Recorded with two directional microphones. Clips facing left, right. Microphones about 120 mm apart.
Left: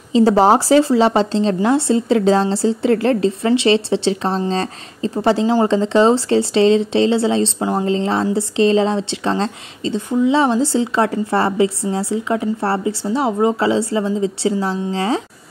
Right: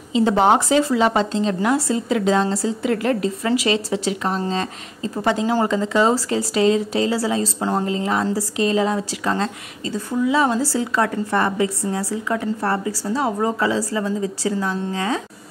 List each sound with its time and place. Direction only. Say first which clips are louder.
0.1 s a woman's voice: left 4 dB; 35° left (ahead or behind)